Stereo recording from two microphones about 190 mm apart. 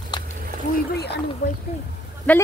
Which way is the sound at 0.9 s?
60° left (ahead or behind).